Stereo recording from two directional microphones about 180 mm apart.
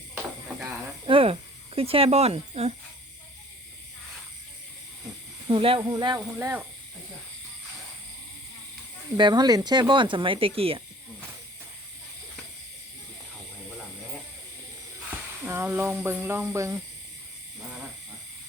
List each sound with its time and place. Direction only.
1.0 s cricket: 30° right (ahead or behind)
5.5 s speech: 30° right (ahead or behind); by 6.7 s 15° right (ahead or behind)
9.1 s speech: 25° right (ahead or behind)
15.4 s speech: 10° right (ahead or behind)